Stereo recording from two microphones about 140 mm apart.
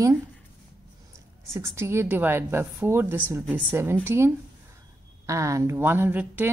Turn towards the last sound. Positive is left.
turn(degrees=-10)  # may be behind; listen again after turning